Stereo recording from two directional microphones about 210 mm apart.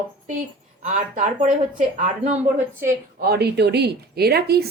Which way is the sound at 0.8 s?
35° right (ahead or behind).